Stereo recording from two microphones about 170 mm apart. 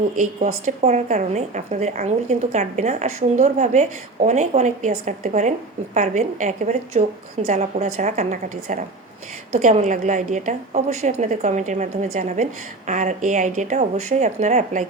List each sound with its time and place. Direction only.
0.2 s a woman's voice: 45° right (ahead or behind)